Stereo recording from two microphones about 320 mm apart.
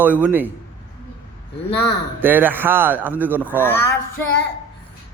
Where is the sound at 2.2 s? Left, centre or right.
Centre.